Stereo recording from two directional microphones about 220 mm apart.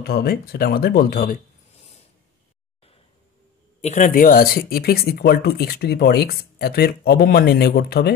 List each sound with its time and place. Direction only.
0.0 s speech: 45° left (ahead or behind)
3.8 s speech: 35° left (ahead or behind)